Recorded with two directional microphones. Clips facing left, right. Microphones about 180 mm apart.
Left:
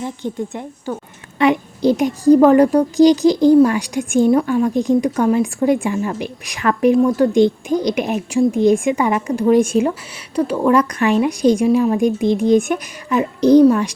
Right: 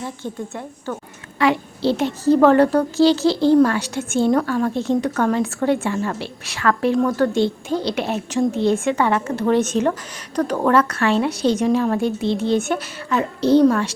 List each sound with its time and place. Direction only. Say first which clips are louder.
0.0 s a child's voice: left 5 dB; 15° left (ahead or behind)